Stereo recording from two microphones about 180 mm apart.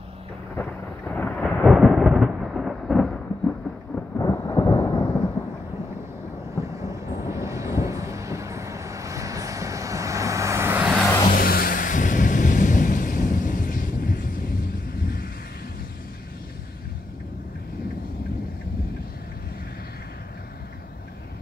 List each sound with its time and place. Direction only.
0.6 s thunder: 10° left (ahead or behind)
6.5 s vehicle: 15° right (ahead or behind)
11.3 s vehicle: 55° left (ahead or behind)